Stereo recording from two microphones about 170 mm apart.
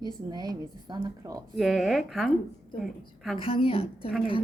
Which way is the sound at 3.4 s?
30° left (ahead or behind).